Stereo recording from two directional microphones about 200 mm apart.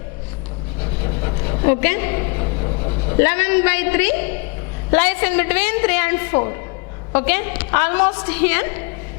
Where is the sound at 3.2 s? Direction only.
10° left (ahead or behind).